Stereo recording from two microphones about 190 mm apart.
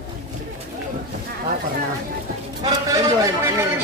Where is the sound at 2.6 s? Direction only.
15° right (ahead or behind).